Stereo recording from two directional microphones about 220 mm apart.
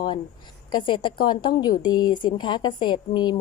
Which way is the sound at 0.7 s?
20° left (ahead or behind).